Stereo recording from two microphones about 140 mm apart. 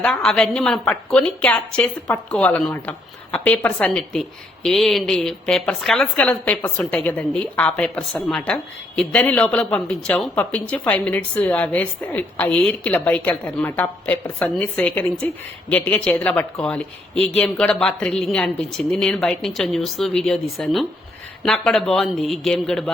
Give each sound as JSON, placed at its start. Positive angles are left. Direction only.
{"t": 0.0, "sound": "a woman's voice", "side_deg": 5}